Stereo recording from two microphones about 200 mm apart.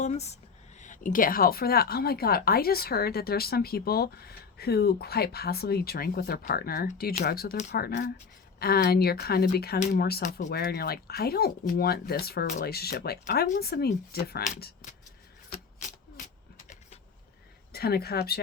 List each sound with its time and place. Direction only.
0.0 s speech: 35° left (ahead or behind)
17.7 s speech: 50° left (ahead or behind)